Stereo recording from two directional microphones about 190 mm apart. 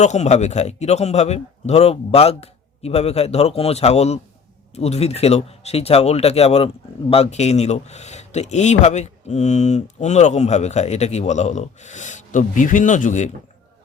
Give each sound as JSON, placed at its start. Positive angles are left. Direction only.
{"t": 0.0, "sound": "speech", "side_deg": 40}